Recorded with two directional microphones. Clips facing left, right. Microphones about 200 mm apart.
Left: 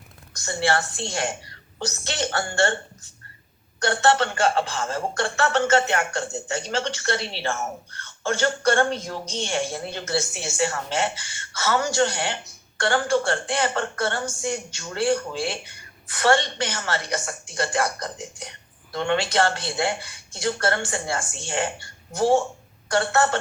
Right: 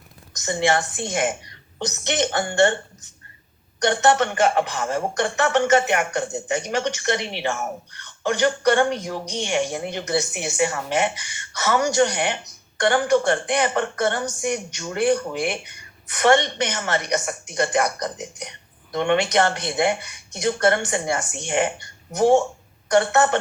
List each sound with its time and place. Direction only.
0.3 s a woman's voice: 15° right (ahead or behind)